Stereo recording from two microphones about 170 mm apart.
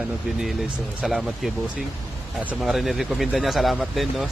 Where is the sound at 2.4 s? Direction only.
5° right (ahead or behind).